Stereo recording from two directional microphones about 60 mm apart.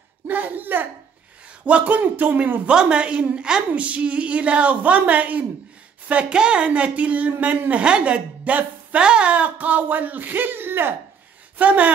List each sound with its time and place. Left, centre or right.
0.3 s a woman's voice: right
2.7 s a woman's voice: centre; by 11.0 s right
11.5 s speech: right